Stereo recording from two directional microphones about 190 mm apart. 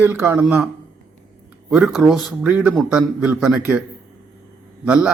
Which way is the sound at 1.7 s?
Centre (ahead or behind).